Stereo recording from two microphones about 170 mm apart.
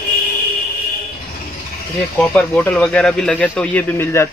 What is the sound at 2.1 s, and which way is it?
Speech, 5° left (ahead or behind).